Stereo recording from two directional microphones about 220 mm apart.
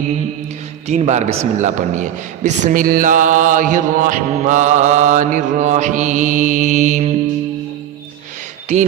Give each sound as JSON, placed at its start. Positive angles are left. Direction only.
{"t": 0.9, "sound": "a man's voice", "side_deg": -30}